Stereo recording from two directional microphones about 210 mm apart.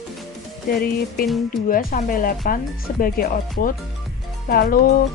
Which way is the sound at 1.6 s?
40° left (ahead or behind).